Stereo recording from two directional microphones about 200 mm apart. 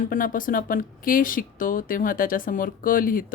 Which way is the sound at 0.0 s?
40° left (ahead or behind).